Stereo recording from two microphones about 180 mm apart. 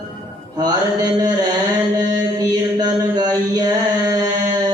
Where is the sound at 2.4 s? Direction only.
20° right (ahead or behind).